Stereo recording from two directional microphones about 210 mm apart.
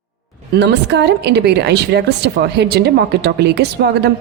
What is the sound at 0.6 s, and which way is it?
A woman's voice, 55° right (ahead or behind).